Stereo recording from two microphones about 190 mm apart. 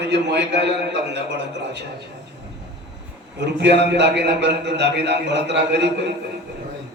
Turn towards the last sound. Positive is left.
turn(degrees=-60)  # may be behind; listen again after turning